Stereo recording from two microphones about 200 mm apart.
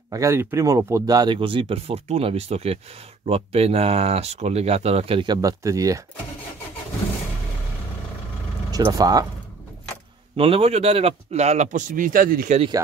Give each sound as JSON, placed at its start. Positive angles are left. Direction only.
{"t": 0.1, "sound": "speech", "side_deg": -15}
{"t": 8.7, "sound": "speech", "side_deg": -20}
{"t": 10.3, "sound": "a man's voice", "side_deg": -30}